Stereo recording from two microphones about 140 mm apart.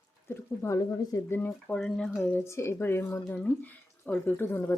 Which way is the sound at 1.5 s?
5° left (ahead or behind).